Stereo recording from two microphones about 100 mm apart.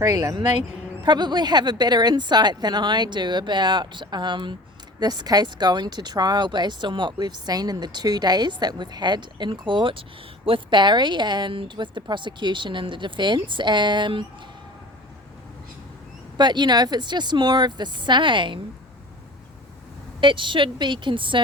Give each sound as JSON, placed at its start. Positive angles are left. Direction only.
{"t": 0.1, "sound": "speech", "side_deg": -35}
{"t": 1.0, "sound": "speech", "side_deg": -45}
{"t": 16.4, "sound": "speech", "side_deg": -50}
{"t": 20.2, "sound": "speech", "side_deg": -55}